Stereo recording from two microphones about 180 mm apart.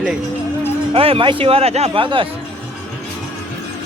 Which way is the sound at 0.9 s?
30° right (ahead or behind).